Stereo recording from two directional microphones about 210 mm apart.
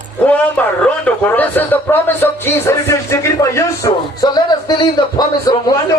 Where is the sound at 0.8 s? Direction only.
10° left (ahead or behind).